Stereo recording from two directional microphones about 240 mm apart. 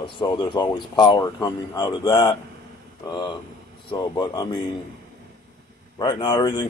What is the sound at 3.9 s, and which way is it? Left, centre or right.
Speech, centre.